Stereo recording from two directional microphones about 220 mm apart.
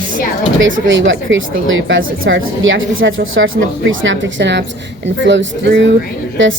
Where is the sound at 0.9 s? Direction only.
60° right (ahead or behind).